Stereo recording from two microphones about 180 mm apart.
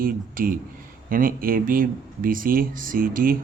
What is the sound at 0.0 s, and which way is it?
Speech, 50° right (ahead or behind).